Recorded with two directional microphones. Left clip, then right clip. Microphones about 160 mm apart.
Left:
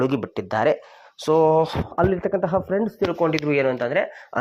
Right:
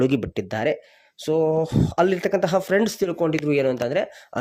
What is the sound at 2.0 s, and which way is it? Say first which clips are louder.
Speech: right 1 dB; 35° right (ahead or behind).